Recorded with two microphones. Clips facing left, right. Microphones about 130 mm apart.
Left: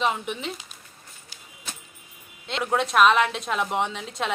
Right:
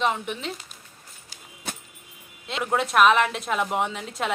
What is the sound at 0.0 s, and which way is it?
Speech, centre (ahead or behind).